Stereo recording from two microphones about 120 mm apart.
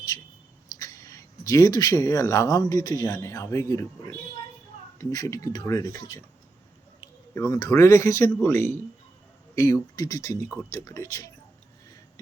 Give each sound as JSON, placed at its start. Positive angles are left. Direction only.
{"t": 0.8, "sound": "speech", "side_deg": 30}
{"t": 4.9, "sound": "speech", "side_deg": 30}
{"t": 7.3, "sound": "speech", "side_deg": 30}